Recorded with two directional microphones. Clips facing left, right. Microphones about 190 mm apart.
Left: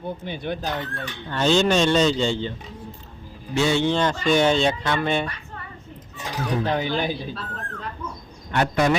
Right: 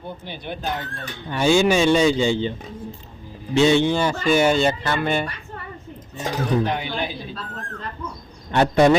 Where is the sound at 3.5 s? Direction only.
20° right (ahead or behind); by 5.3 s 5° right (ahead or behind).